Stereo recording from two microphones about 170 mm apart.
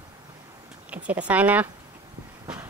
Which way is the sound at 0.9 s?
10° right (ahead or behind).